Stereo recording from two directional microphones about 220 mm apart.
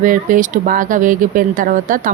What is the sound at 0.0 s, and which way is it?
Speech, 35° right (ahead or behind).